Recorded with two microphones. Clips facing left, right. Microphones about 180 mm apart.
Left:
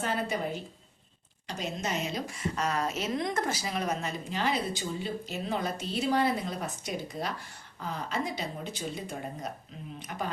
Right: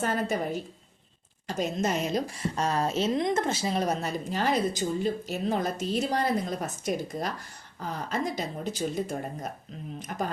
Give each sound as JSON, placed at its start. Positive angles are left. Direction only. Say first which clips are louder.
{"t": 0.0, "sound": "a woman's voice", "louder": "right 3 dB", "side_deg": -45}